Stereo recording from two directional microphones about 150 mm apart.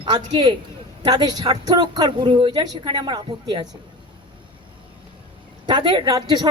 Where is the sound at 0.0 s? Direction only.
35° right (ahead or behind).